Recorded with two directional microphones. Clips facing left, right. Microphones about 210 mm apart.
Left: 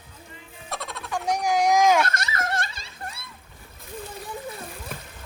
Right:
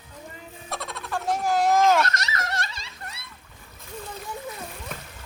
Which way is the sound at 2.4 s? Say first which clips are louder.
Left 3 dB; 50° left (ahead or behind).